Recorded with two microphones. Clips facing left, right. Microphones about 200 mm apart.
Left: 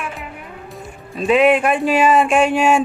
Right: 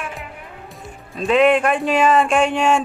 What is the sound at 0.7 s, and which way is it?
Speech, centre (ahead or behind).